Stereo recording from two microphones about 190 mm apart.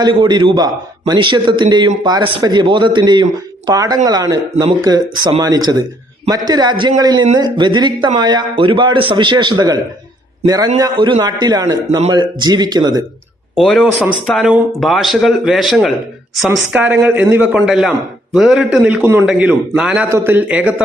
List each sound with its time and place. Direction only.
0.0 s a man's voice: 25° right (ahead or behind)
13.6 s a man's voice: centre (ahead or behind)